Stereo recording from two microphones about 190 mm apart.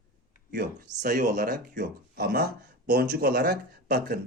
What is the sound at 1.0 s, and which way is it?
Speech, 45° right (ahead or behind).